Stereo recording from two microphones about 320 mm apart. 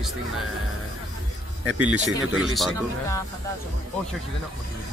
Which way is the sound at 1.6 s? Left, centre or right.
Right.